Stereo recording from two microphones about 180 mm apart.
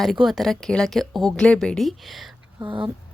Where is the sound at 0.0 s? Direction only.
Centre (ahead or behind).